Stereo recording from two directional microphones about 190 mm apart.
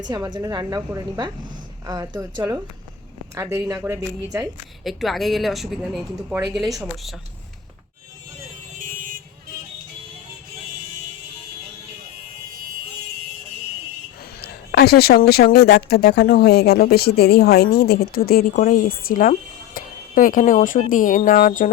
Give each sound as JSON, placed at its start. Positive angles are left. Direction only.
{"t": 0.0, "sound": "a woman's voice", "side_deg": -20}
{"t": 4.8, "sound": "speech", "side_deg": 0}
{"t": 8.8, "sound": "vehicle", "side_deg": -45}
{"t": 14.7, "sound": "speech", "side_deg": 55}